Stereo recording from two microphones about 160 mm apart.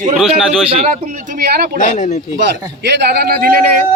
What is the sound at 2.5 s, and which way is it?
A man's voice, 90° right.